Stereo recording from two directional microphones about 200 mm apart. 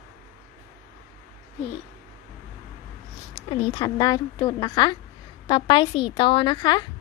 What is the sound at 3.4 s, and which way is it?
Speech, 20° left (ahead or behind).